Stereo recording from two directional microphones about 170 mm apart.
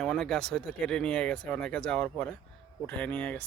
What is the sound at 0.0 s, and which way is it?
A man's voice, centre (ahead or behind).